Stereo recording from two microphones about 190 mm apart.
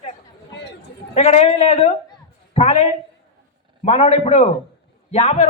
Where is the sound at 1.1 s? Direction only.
35° left (ahead or behind).